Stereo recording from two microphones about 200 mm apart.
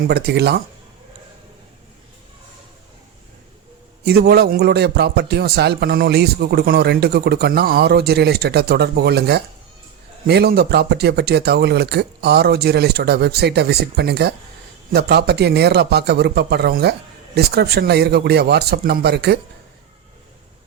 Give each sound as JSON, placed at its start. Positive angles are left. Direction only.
{"t": 0.1, "sound": "a man's voice", "side_deg": -55}
{"t": 4.0, "sound": "a man's voice", "side_deg": -50}